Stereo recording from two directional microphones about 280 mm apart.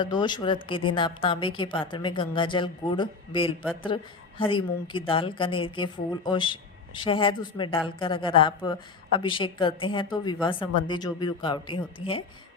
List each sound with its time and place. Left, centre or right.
0.0 s a woman's voice: centre